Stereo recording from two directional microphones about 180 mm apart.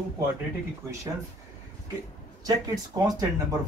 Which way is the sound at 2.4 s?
20° right (ahead or behind).